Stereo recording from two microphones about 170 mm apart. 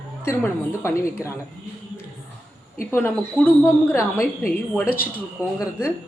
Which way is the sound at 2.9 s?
10° left (ahead or behind).